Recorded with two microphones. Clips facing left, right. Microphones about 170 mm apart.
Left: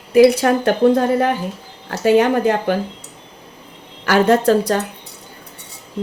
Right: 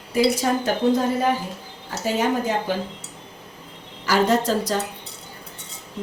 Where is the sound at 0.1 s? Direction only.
70° left (ahead or behind).